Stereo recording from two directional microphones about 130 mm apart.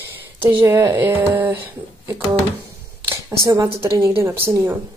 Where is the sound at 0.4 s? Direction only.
20° right (ahead or behind).